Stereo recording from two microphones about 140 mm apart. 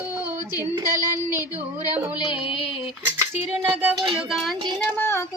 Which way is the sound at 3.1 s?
15° right (ahead or behind).